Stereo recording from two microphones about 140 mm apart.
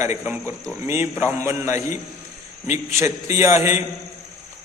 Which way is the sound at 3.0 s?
20° right (ahead or behind).